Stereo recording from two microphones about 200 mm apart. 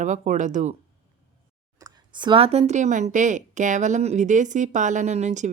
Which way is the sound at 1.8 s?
20° right (ahead or behind).